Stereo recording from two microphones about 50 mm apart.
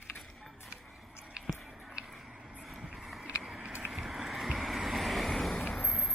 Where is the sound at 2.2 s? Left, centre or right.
Centre.